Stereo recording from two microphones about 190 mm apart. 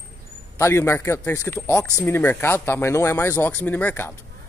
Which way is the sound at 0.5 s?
15° left (ahead or behind).